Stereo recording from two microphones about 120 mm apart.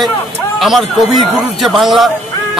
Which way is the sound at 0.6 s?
Centre (ahead or behind).